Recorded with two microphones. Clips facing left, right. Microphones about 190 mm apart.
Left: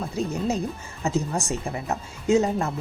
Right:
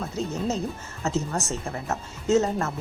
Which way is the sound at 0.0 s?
10° left (ahead or behind).